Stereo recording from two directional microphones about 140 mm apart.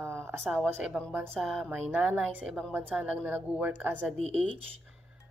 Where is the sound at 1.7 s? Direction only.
10° right (ahead or behind).